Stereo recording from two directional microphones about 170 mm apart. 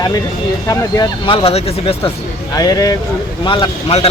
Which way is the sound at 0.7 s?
20° left (ahead or behind).